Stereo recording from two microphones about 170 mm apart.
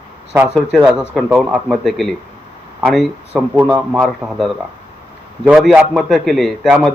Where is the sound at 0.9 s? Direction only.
5° right (ahead or behind).